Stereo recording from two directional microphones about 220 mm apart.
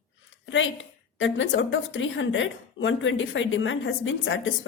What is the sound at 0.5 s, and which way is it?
A woman's voice, 60° left (ahead or behind).